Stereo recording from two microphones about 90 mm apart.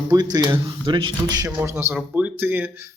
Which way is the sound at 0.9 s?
65° right (ahead or behind).